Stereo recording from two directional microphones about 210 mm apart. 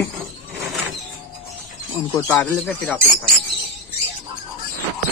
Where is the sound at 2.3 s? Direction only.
5° left (ahead or behind).